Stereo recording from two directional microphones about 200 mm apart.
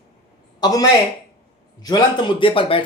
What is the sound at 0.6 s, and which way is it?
Speech, 20° left (ahead or behind).